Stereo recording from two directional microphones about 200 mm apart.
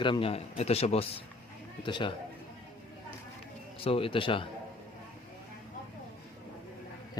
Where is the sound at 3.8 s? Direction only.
25° left (ahead or behind).